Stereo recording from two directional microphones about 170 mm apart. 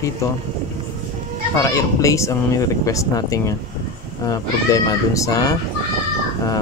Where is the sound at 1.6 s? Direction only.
20° left (ahead or behind).